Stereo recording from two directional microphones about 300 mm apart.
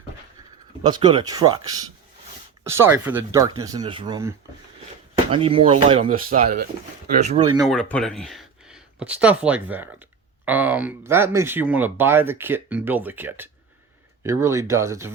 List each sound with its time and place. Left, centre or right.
0.8 s speech: centre
7.7 s speech: centre